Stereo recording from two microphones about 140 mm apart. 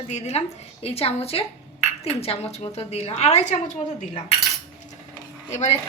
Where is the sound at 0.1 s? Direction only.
55° left (ahead or behind).